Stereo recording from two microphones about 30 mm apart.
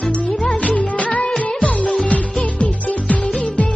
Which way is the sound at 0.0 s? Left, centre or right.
Left.